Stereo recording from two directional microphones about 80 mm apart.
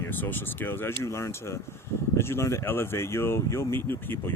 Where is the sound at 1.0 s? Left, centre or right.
Left.